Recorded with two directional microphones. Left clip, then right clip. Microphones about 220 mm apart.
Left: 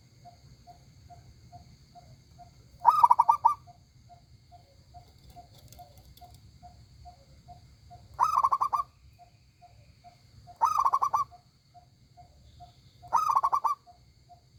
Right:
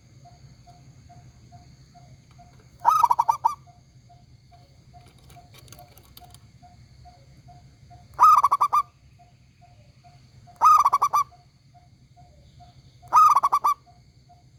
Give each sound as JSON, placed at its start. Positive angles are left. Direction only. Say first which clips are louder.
{"t": 2.8, "sound": "goose", "louder": "right 1 dB", "side_deg": -20}
{"t": 8.1, "sound": "owl", "louder": "right 9 dB", "side_deg": -25}
{"t": 10.6, "sound": "owl", "louder": "right 8 dB", "side_deg": -25}
{"t": 13.1, "sound": "goose", "louder": "right 9 dB", "side_deg": -25}